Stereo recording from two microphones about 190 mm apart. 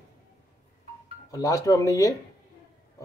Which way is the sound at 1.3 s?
20° left (ahead or behind).